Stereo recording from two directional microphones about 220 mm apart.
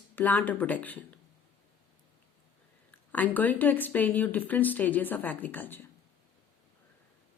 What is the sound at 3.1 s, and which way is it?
Speech, 5° left (ahead or behind).